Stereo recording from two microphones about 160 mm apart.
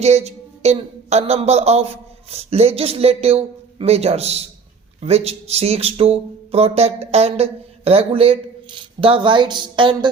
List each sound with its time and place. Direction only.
0.0 s speech: 40° right (ahead or behind)